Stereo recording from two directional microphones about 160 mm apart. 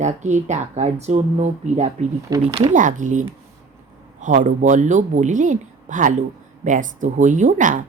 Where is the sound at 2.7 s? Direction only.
50° right (ahead or behind).